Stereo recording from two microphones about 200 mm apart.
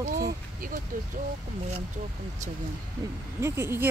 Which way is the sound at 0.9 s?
45° right (ahead or behind).